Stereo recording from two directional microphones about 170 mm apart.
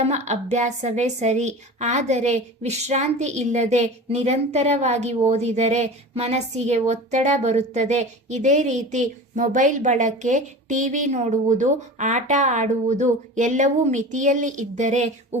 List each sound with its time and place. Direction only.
0.0 s a woman's voice: 40° right (ahead or behind)